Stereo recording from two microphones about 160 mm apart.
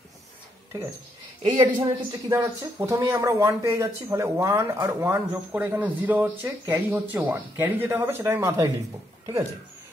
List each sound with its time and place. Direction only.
1.5 s speech: 20° right (ahead or behind)